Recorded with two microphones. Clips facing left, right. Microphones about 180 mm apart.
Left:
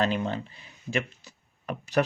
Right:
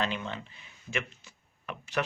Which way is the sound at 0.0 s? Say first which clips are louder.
Left 6 dB; 40° left (ahead or behind).